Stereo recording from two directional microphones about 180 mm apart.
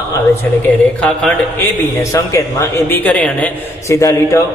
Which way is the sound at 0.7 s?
5° left (ahead or behind).